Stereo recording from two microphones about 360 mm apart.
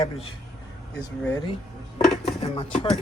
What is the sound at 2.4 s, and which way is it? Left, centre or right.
Speech, centre.